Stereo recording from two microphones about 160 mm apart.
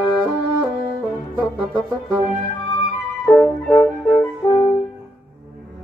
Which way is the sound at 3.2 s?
5° left (ahead or behind).